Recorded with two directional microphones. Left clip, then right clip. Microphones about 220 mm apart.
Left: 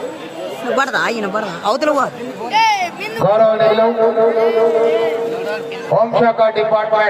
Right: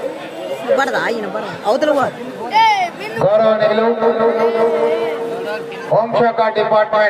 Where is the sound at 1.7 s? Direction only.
35° left (ahead or behind).